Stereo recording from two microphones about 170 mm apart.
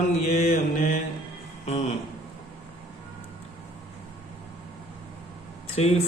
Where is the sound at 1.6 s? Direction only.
40° left (ahead or behind).